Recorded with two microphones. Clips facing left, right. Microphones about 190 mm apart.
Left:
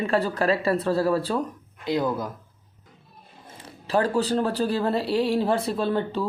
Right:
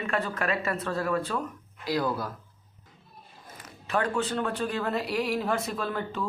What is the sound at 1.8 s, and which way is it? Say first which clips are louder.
Speech: left 3 dB; 20° left (ahead or behind).